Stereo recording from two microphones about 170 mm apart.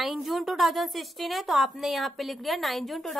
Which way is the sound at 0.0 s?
Centre (ahead or behind).